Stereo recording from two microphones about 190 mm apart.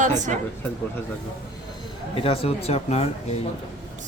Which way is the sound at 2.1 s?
30° left (ahead or behind).